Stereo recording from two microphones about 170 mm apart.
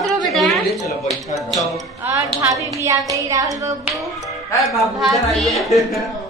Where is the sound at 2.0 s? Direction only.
15° right (ahead or behind).